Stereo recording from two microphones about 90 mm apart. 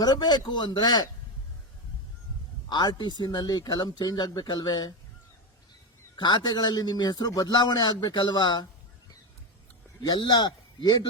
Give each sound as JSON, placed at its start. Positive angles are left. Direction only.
{"t": 0.0, "sound": "a man's voice", "side_deg": 50}
{"t": 2.6, "sound": "a man's voice", "side_deg": 55}
{"t": 6.1, "sound": "a man's voice", "side_deg": 55}
{"t": 10.0, "sound": "a man's voice", "side_deg": 50}